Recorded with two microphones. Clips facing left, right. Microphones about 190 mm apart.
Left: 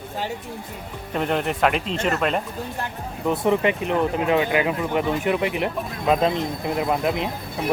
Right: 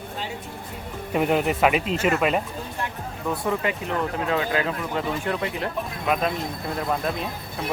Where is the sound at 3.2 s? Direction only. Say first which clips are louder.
Left 5 dB; 20° left (ahead or behind).